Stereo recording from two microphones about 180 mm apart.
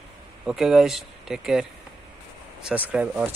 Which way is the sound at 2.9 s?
10° right (ahead or behind).